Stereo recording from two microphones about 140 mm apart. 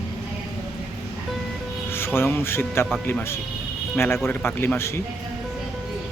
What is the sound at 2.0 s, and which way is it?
Speech, 15° left (ahead or behind).